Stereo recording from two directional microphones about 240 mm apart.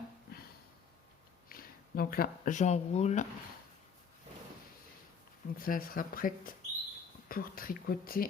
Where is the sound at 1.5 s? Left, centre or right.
Left.